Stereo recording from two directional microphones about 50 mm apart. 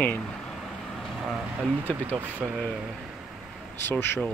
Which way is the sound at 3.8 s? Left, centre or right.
Left.